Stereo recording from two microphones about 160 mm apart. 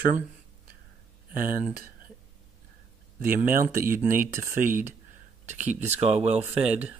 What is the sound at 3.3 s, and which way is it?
Speech, 60° right (ahead or behind).